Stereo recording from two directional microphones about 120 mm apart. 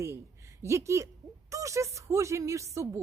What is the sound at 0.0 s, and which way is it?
A woman's voice, 25° right (ahead or behind).